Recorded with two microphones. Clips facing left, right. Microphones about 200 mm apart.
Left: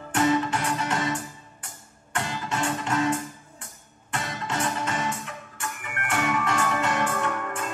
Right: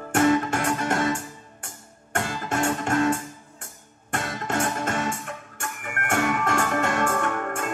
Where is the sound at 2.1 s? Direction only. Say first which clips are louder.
Right 3 dB; 45° right (ahead or behind).